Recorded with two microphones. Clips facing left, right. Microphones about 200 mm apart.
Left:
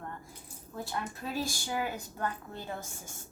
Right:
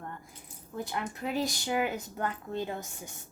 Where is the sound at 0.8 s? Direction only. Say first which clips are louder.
Right 3 dB; 20° right (ahead or behind).